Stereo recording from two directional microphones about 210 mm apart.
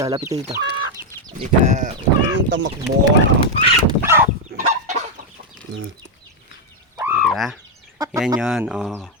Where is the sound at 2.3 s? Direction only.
60° right (ahead or behind).